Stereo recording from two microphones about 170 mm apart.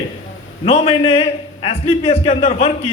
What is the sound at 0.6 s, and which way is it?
A man's voice, 35° left (ahead or behind).